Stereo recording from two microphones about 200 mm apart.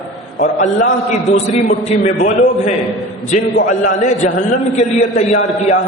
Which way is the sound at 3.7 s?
35° left (ahead or behind).